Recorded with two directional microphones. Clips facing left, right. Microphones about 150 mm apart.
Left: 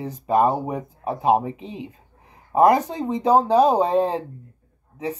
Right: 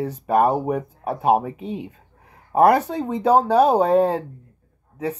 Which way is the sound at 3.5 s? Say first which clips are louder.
Even; 10° right (ahead or behind).